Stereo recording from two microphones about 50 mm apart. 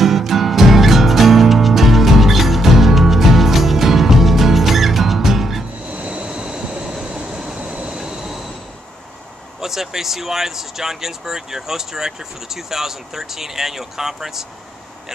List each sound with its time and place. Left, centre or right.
0.0 s music: centre
5.9 s a sound: right
6.2 s train: centre
8.0 s train: centre
9.6 s speech: centre